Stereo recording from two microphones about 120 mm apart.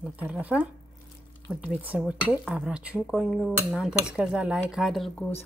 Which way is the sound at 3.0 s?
5° left (ahead or behind).